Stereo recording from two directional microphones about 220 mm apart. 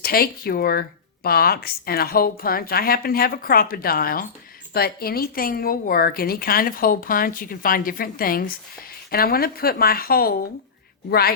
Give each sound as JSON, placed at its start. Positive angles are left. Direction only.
{"t": 0.0, "sound": "a woman's voice", "side_deg": 45}